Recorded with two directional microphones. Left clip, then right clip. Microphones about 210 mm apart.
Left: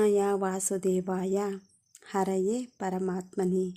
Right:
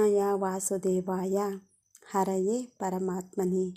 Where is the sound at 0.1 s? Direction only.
20° left (ahead or behind).